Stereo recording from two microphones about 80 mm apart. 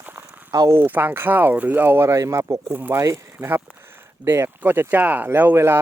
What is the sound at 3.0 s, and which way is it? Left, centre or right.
Speech, right.